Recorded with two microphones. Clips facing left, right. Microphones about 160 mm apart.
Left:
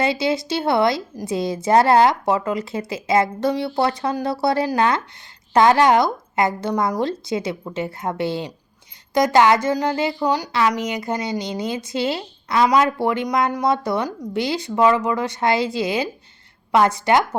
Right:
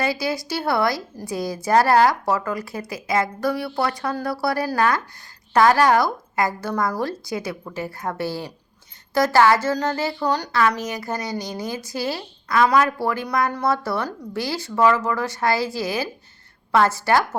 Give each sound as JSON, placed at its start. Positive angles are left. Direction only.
{"t": 0.0, "sound": "a woman's voice", "side_deg": 25}